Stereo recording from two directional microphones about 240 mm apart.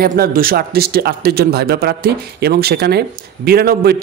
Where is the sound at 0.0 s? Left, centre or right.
Right.